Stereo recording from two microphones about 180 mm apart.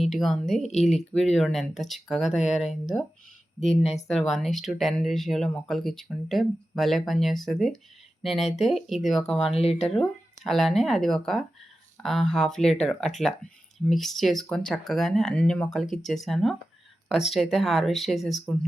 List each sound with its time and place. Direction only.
0.0 s speech: centre (ahead or behind)
3.6 s speech: 35° left (ahead or behind)
4.1 s speech: centre (ahead or behind)
9.5 s speech: 35° left (ahead or behind)
10.4 s speech: centre (ahead or behind)